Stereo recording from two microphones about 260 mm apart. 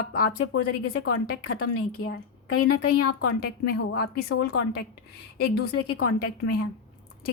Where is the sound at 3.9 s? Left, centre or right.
Left.